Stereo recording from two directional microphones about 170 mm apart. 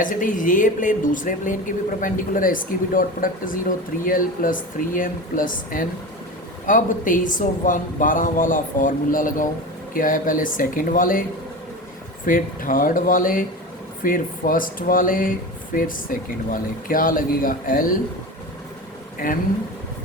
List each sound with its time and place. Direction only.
0.0 s speech: 50° left (ahead or behind)
19.2 s speech: 55° left (ahead or behind)